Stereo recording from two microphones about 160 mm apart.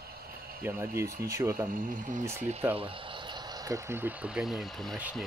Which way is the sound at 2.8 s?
35° right (ahead or behind).